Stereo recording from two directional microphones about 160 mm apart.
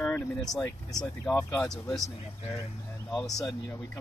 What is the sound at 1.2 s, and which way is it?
Speech, 5° left (ahead or behind).